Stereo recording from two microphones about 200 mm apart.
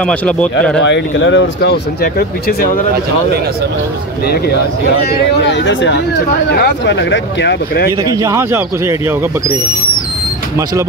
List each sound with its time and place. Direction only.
0.0 s speech: 5° left (ahead or behind)
0.7 s speech: 65° left (ahead or behind); by 2.8 s 45° left (ahead or behind)
5.1 s speech: 60° left (ahead or behind)
8.0 s a man's voice: 15° right (ahead or behind)